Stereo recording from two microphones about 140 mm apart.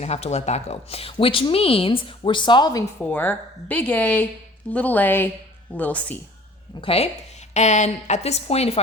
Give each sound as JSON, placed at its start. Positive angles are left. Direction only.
{"t": 0.0, "sound": "a woman's voice", "side_deg": 50}
{"t": 3.0, "sound": "speech", "side_deg": 15}
{"t": 6.8, "sound": "a woman's voice", "side_deg": 45}
{"t": 7.5, "sound": "a woman's voice", "side_deg": 55}